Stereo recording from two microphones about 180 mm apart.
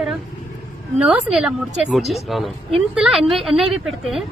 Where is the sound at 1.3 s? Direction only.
5° right (ahead or behind).